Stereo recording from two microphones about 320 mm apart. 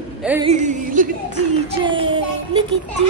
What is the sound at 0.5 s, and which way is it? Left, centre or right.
Speech, right.